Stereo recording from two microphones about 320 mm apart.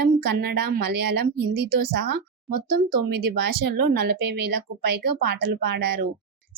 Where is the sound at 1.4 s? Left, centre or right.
Right.